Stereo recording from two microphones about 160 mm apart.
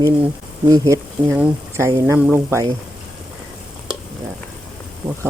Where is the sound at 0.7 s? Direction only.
20° right (ahead or behind).